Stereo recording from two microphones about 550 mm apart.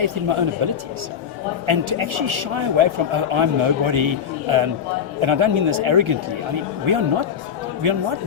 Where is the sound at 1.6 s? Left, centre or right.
Right.